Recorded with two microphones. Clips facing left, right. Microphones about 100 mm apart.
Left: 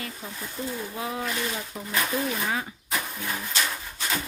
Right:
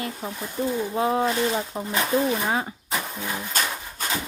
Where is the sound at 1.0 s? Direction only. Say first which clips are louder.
Right 9 dB; 35° right (ahead or behind).